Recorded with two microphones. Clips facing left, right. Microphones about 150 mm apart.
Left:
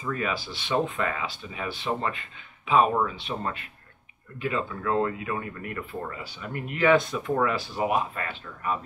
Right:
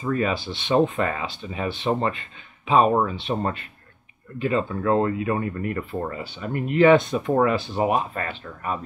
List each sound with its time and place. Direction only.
0.0 s speech: 35° right (ahead or behind)
0.9 s speech: 35° right (ahead or behind)
7.8 s speech: 35° right (ahead or behind)